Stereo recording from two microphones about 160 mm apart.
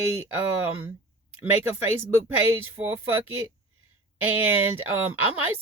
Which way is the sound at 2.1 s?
15° right (ahead or behind).